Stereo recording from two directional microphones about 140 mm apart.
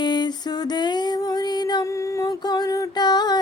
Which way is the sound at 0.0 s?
30° left (ahead or behind).